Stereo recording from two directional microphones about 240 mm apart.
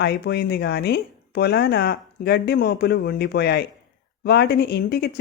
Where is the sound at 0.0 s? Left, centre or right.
Left.